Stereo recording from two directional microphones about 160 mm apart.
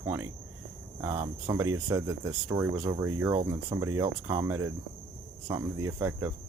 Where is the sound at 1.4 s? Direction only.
20° right (ahead or behind).